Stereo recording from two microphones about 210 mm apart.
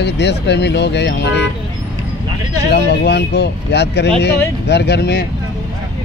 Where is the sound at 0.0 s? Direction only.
55° left (ahead or behind).